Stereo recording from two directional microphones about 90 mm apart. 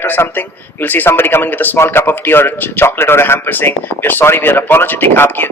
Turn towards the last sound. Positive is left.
turn(degrees=25)  # may be behind; listen again after turning